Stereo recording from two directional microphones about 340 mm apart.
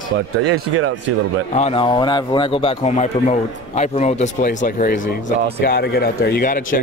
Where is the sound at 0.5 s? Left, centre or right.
Right.